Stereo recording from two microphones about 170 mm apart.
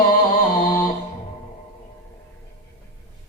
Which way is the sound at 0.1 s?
55° left (ahead or behind).